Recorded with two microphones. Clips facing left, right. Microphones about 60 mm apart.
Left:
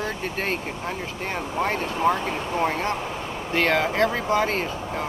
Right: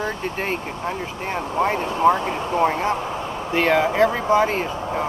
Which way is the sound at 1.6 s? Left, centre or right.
Centre.